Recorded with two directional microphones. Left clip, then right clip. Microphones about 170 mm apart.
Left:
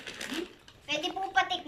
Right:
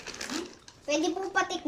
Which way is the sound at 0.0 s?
10° right (ahead or behind).